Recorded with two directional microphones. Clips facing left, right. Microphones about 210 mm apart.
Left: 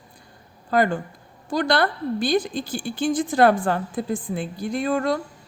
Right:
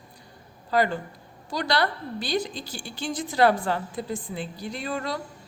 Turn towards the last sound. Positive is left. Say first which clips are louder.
# left 8 dB
turn(degrees=50)  # may be behind; listen again after turning